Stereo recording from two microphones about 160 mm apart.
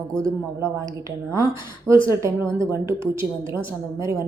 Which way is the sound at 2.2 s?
20° right (ahead or behind).